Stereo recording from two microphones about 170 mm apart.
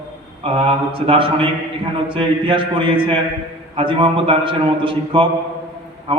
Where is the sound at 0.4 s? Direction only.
30° right (ahead or behind).